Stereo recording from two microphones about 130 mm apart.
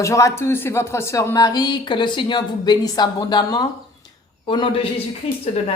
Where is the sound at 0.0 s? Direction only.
25° left (ahead or behind); by 5.4 s 45° left (ahead or behind).